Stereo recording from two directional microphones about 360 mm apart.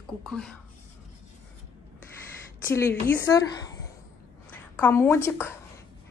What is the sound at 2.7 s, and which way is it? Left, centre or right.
Speech, centre.